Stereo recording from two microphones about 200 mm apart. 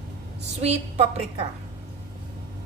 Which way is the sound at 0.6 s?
30° right (ahead or behind).